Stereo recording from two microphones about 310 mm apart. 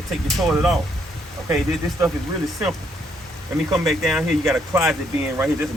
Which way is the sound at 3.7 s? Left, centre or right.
Centre.